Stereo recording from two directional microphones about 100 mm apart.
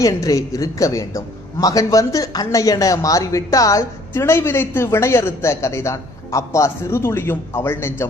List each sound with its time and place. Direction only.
0.0 s a man's voice: 35° left (ahead or behind)